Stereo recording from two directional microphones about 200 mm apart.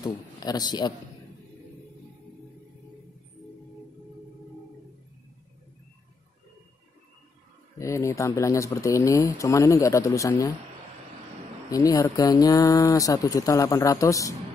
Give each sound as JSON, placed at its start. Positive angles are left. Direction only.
{"t": 0.0, "sound": "a man's voice", "side_deg": 20}
{"t": 7.8, "sound": "speech", "side_deg": 15}
{"t": 11.7, "sound": "speech", "side_deg": 15}